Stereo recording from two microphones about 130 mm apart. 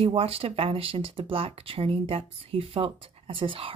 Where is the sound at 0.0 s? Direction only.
50° right (ahead or behind).